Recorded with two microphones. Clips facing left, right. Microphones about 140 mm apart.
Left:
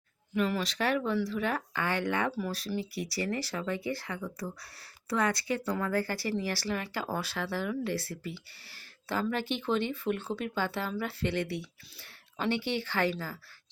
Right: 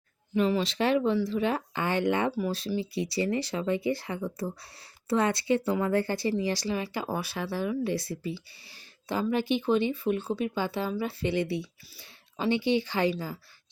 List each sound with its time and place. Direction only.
0.3 s speech: 25° right (ahead or behind)